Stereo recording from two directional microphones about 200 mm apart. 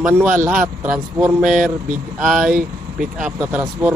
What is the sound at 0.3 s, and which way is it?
Speech, 40° right (ahead or behind).